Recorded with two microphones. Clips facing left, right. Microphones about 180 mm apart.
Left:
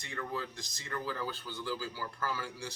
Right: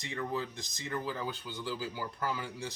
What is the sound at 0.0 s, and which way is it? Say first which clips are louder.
Speech: right 3 dB; 20° right (ahead or behind).